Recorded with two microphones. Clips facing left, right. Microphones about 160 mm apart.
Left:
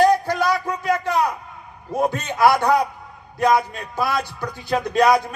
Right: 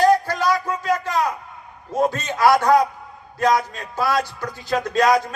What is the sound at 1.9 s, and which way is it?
Speech, 15° left (ahead or behind).